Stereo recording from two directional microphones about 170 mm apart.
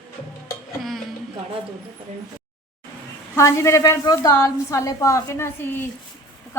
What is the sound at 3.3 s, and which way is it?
A woman's voice, 15° left (ahead or behind).